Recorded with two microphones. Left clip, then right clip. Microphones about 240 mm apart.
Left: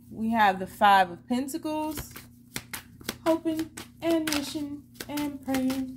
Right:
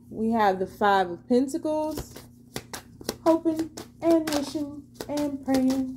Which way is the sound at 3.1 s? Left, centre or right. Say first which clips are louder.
Right 4 dB; left.